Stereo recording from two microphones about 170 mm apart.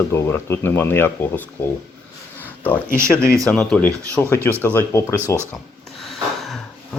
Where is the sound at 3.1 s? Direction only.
5° left (ahead or behind).